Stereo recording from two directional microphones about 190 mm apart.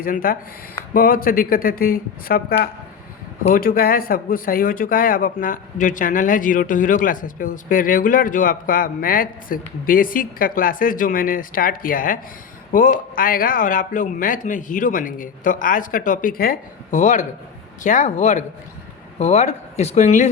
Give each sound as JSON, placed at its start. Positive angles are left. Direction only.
{"t": 0.0, "sound": "speech", "side_deg": 50}